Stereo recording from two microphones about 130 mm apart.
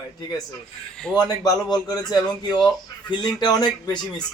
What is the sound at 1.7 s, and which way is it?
Speech, 30° left (ahead or behind).